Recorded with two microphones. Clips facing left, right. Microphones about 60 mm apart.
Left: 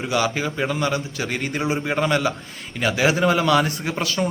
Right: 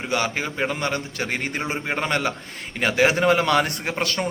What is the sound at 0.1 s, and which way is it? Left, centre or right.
A man's voice, right.